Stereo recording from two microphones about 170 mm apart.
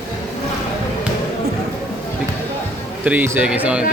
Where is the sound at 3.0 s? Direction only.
10° right (ahead or behind).